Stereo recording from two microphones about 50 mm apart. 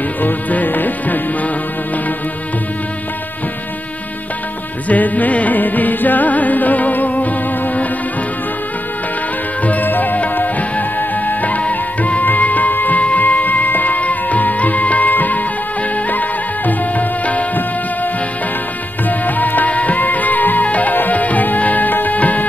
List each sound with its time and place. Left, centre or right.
0.2 s music: left
4.8 s music: left
9.6 s music: left
19.0 s music: left